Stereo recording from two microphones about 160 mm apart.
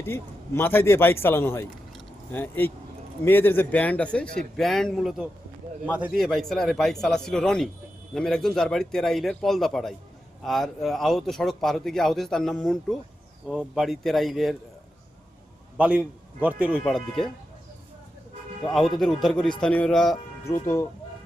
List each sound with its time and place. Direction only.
0.0 s a man's voice: 15° left (ahead or behind)
15.8 s a man's voice: 10° right (ahead or behind)
16.8 s speech: 5° left (ahead or behind)
18.7 s speech: centre (ahead or behind)
20.5 s a man's voice: 20° left (ahead or behind)